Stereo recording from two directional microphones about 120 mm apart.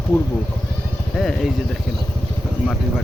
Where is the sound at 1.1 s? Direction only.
Centre (ahead or behind).